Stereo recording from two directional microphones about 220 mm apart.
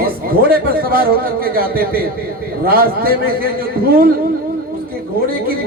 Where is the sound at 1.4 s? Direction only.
40° right (ahead or behind).